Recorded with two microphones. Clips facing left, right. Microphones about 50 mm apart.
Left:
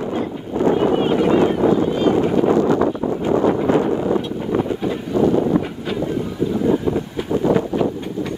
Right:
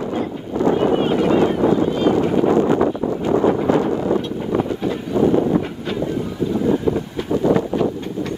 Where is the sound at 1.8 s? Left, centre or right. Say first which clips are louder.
Even; centre.